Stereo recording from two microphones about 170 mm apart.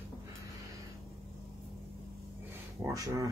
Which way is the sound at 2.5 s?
20° right (ahead or behind).